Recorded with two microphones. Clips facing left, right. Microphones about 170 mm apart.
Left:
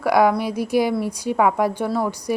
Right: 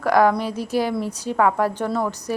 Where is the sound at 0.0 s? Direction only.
10° left (ahead or behind).